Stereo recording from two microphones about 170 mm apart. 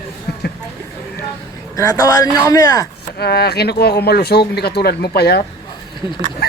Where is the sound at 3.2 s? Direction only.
70° left (ahead or behind).